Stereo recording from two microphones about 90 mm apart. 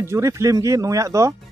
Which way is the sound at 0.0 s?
30° right (ahead or behind).